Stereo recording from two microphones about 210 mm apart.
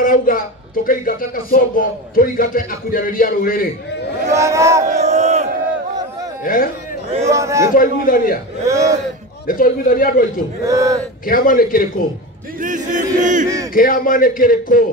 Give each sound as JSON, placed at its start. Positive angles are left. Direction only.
{"t": 0.0, "sound": "music", "side_deg": 40}
{"t": 4.3, "sound": "speech", "side_deg": -15}
{"t": 4.8, "sound": "crowd", "side_deg": -35}
{"t": 6.4, "sound": "music", "side_deg": 40}
{"t": 7.2, "sound": "speech", "side_deg": -15}
{"t": 7.7, "sound": "music", "side_deg": 40}
{"t": 8.6, "sound": "speech", "side_deg": -15}
{"t": 9.5, "sound": "a man's voice", "side_deg": 40}
{"t": 10.6, "sound": "speech", "side_deg": -15}
{"t": 11.2, "sound": "music", "side_deg": 40}
{"t": 12.5, "sound": "speech", "side_deg": -40}
{"t": 13.7, "sound": "a man's voice", "side_deg": 40}